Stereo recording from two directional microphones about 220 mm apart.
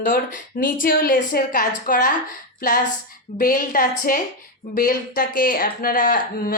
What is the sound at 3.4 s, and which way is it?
Speech, 40° left (ahead or behind).